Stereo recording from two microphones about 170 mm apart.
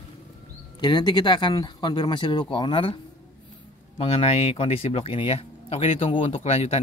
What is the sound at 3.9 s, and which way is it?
Speech, 35° left (ahead or behind).